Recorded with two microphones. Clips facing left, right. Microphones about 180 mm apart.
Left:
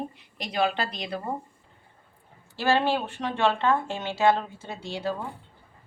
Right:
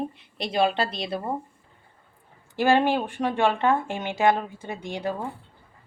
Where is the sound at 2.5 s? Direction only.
15° right (ahead or behind).